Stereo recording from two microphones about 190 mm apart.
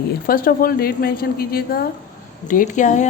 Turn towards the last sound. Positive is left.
turn(degrees=40)  # may be behind; listen again after turning